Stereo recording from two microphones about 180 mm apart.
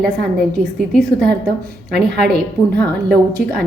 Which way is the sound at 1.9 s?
65° right (ahead or behind).